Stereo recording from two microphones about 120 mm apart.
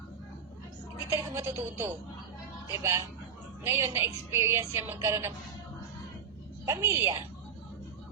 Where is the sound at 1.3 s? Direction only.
20° right (ahead or behind).